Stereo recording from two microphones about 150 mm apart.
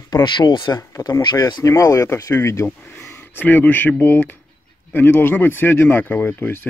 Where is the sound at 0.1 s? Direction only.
30° left (ahead or behind).